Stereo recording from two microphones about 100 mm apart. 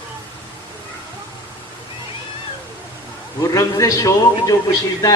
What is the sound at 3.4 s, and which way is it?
A man's voice, 35° left (ahead or behind).